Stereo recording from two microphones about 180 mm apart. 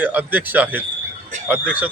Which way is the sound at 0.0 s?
10° right (ahead or behind).